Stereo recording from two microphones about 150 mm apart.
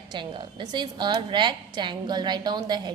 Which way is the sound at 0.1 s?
30° right (ahead or behind).